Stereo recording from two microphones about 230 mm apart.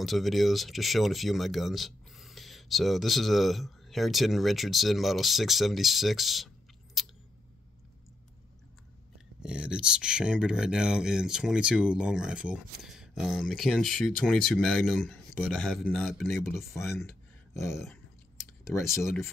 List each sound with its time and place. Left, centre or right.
0.0 s speech: centre
9.4 s speech: centre
16.4 s speech: centre
17.6 s speech: centre